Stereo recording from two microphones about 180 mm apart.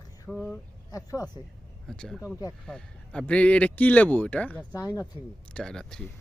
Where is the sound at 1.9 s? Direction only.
5° left (ahead or behind).